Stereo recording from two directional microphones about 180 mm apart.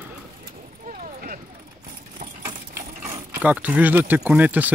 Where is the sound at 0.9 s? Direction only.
55° right (ahead or behind).